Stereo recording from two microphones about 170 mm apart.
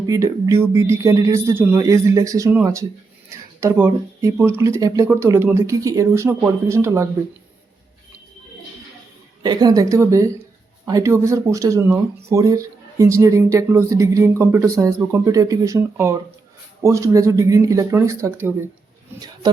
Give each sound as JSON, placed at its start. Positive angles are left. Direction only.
{"t": 0.0, "sound": "speech", "side_deg": -20}
{"t": 9.4, "sound": "a woman's voice", "side_deg": -25}